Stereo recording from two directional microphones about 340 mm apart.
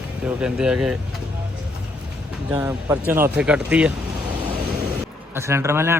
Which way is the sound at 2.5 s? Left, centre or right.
Centre.